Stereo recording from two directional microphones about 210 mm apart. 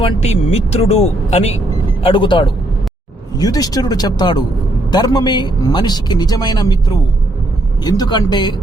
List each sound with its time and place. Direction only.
0.0 s a man's voice: 30° left (ahead or behind)